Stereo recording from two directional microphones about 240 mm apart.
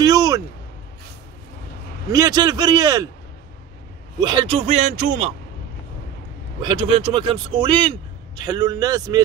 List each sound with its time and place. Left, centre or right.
0.0 s a sound: centre
2.0 s speech: centre
4.2 s speech: centre
6.6 s speech: right